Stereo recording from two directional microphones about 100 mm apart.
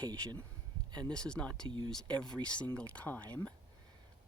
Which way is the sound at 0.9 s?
45° right (ahead or behind).